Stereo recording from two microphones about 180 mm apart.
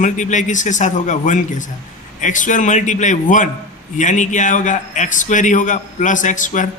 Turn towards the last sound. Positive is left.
turn(degrees=45)  # may be behind; listen again after turning